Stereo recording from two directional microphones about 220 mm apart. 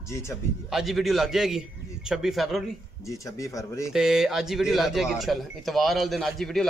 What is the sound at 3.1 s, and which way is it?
Speech, 15° left (ahead or behind).